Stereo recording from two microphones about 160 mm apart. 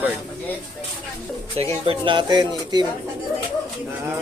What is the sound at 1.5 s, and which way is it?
Speech, 35° right (ahead or behind).